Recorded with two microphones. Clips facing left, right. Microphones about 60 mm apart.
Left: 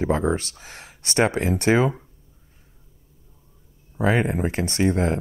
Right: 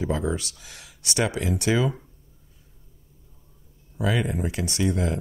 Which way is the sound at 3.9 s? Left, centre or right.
Left.